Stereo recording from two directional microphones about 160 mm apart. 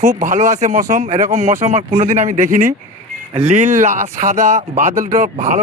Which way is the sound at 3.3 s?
45° right (ahead or behind).